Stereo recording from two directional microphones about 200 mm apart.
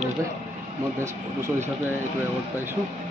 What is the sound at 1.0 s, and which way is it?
Speech, 15° right (ahead or behind).